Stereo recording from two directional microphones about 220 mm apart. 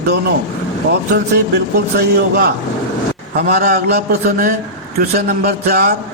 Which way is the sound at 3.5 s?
45° right (ahead or behind).